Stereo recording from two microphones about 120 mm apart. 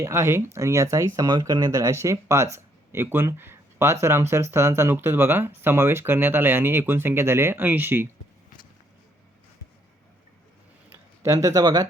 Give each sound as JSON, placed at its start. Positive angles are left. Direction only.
{"t": 0.0, "sound": "speech", "side_deg": -20}
{"t": 10.9, "sound": "speech", "side_deg": -20}